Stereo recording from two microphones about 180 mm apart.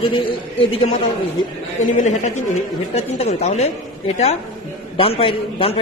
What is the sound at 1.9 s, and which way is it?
A man's voice, 40° left (ahead or behind).